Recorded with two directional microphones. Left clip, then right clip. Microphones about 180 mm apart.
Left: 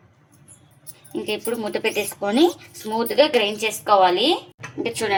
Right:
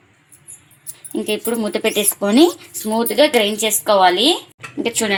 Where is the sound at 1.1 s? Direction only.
45° right (ahead or behind).